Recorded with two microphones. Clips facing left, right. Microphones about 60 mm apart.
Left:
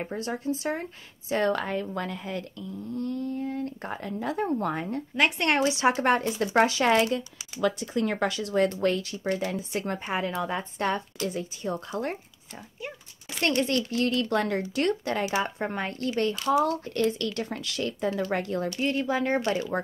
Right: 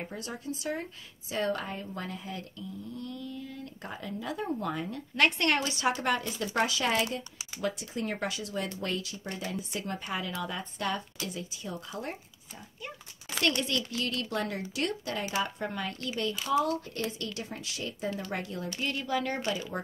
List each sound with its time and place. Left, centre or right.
0.0 s speech: left
1.3 s speech: left
2.9 s speech: left
5.6 s speech: left
6.9 s speech: left
8.5 s speech: left
9.6 s speech: left
13.6 s speech: left
16.9 s speech: left
18.3 s speech: left
18.8 s speech: left